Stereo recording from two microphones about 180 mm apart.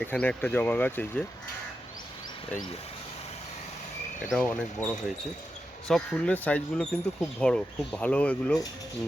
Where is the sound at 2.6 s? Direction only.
35° left (ahead or behind).